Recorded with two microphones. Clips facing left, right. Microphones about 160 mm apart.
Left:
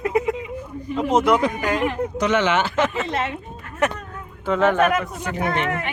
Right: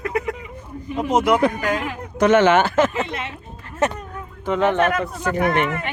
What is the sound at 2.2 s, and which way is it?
Speech, 50° right (ahead or behind).